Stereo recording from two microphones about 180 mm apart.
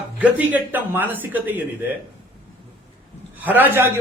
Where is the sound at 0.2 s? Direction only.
10° right (ahead or behind).